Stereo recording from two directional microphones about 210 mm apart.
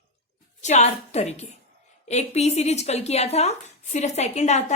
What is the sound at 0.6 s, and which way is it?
A woman's voice, 35° left (ahead or behind).